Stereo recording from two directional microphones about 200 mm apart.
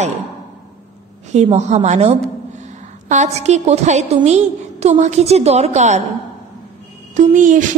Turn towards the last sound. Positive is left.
turn(degrees=-40)  # may be behind; listen again after turning